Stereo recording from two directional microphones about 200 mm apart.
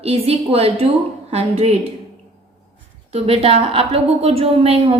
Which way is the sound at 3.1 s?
30° right (ahead or behind).